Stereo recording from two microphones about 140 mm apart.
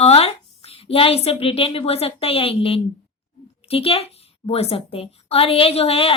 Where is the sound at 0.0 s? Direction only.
45° left (ahead or behind).